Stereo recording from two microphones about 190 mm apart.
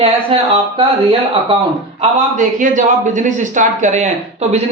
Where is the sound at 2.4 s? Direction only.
40° right (ahead or behind).